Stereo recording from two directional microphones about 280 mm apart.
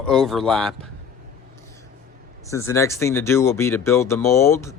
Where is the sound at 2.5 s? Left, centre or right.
Centre.